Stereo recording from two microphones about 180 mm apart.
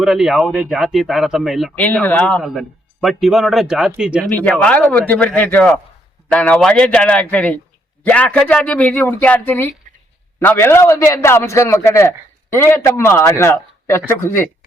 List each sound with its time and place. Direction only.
0.0 s a man's voice: centre (ahead or behind)
4.3 s a man's voice: 10° left (ahead or behind)